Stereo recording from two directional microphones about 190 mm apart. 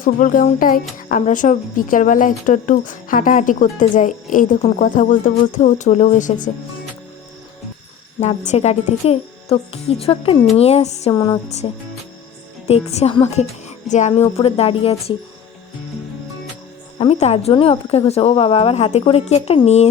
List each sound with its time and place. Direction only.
0.0 s a woman's voice: 45° left (ahead or behind)
8.2 s speech: 35° left (ahead or behind)
11.1 s a sound: 20° left (ahead or behind)
11.4 s speech: 35° left (ahead or behind)
17.0 s speech: 35° left (ahead or behind)